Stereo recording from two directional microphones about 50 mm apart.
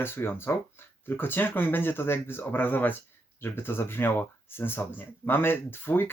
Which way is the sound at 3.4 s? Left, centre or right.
Left.